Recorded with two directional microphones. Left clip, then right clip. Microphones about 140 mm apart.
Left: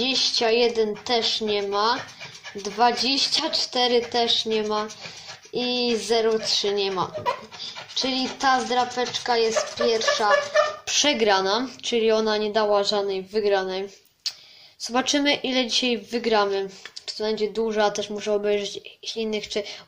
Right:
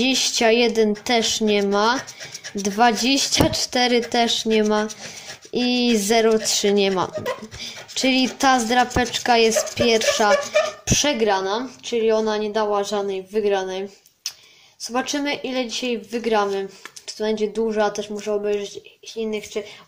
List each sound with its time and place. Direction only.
0.0 s speech: 40° right (ahead or behind)
11.1 s speech: 5° right (ahead or behind)
17.2 s speech: 20° right (ahead or behind)
17.7 s speech: 10° right (ahead or behind)